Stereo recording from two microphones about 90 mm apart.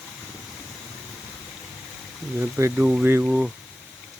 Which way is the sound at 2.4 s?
25° right (ahead or behind).